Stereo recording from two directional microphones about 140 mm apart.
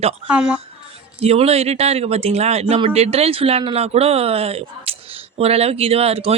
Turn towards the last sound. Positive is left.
turn(degrees=-45)  # may be behind; listen again after turning